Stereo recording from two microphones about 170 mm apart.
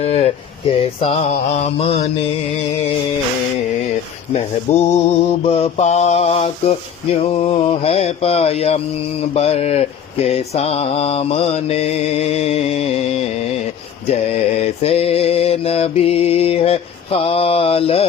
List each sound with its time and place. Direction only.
0.0 s mantra: 35° left (ahead or behind)
4.7 s mantra: 40° left (ahead or behind)
14.6 s mantra: 35° left (ahead or behind)